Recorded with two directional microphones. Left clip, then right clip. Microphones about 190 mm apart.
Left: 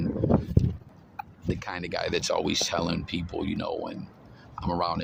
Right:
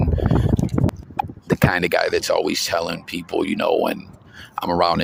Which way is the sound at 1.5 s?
50° right (ahead or behind).